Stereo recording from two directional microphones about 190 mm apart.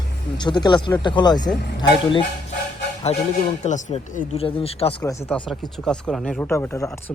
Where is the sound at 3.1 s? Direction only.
35° left (ahead or behind).